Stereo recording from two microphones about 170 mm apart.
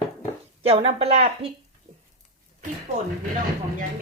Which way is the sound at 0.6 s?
35° right (ahead or behind).